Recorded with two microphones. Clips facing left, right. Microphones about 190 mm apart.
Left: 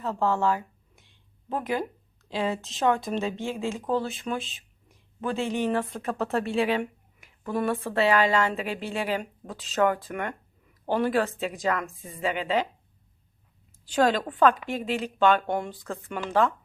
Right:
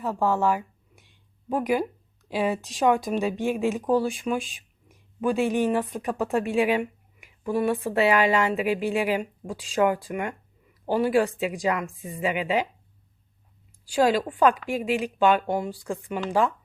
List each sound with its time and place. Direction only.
0.0 s speech: 15° right (ahead or behind)
13.8 s speech: 10° right (ahead or behind)